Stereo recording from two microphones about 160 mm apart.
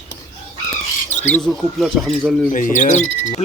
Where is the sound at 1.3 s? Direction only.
Centre (ahead or behind).